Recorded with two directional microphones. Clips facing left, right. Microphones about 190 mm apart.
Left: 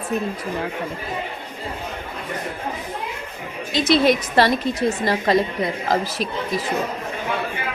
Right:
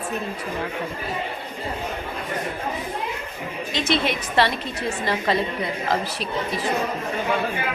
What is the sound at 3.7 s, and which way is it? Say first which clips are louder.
A woman's voice: left 7 dB; 40° left (ahead or behind).